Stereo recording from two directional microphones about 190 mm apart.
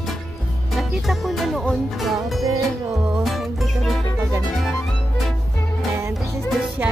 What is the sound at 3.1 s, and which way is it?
Music, centre (ahead or behind).